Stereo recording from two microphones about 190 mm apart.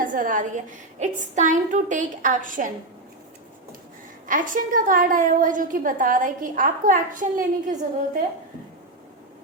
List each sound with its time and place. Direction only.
0.0 s a woman's voice: 45° right (ahead or behind)
4.3 s a woman's voice: 45° right (ahead or behind)